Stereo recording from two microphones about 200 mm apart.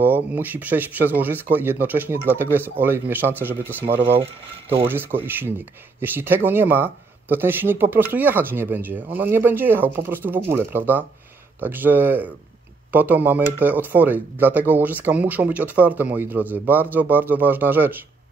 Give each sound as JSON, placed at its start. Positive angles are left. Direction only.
{"t": 0.0, "sound": "speech", "side_deg": -10}
{"t": 4.1, "sound": "speech", "side_deg": -30}
{"t": 4.8, "sound": "speech", "side_deg": -10}